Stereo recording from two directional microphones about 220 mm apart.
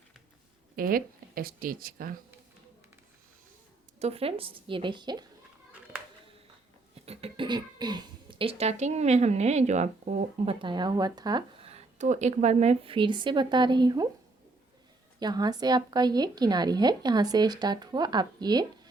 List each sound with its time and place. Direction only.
0.8 s speech: 40° right (ahead or behind)
4.0 s speech: 25° right (ahead or behind)
6.9 s speech: 25° right (ahead or behind)
15.2 s speech: 20° right (ahead or behind)